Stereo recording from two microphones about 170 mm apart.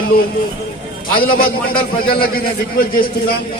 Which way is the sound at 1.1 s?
60° left (ahead or behind).